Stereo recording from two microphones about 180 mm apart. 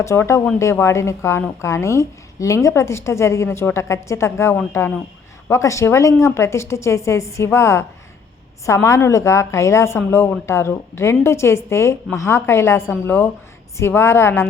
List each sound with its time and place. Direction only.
0.0 s a woman's voice: 15° left (ahead or behind)